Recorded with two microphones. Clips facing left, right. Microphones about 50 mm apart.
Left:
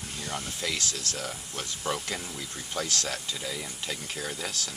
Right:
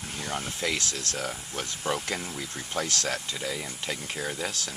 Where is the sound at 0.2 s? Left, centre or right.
Right.